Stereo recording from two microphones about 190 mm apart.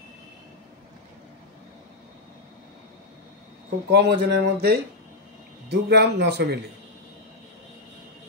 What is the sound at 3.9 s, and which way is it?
Speech, 60° right (ahead or behind).